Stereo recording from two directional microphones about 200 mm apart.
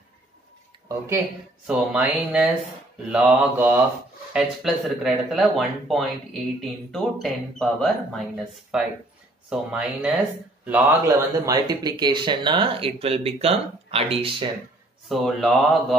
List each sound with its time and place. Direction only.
0.8 s mantra: 15° right (ahead or behind)
1.7 s speech: 5° right (ahead or behind)
3.1 s mantra: 10° right (ahead or behind)
4.3 s speech: centre (ahead or behind); by 14.5 s 25° right (ahead or behind)
15.0 s speech: centre (ahead or behind)